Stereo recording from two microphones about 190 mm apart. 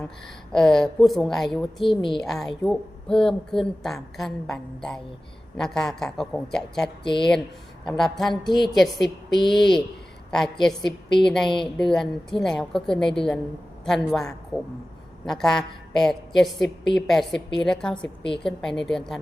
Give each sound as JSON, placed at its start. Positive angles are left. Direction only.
{"t": 0.5, "sound": "a woman's voice", "side_deg": 5}
{"t": 7.0, "sound": "speech", "side_deg": 25}
{"t": 7.9, "sound": "a woman's voice", "side_deg": 0}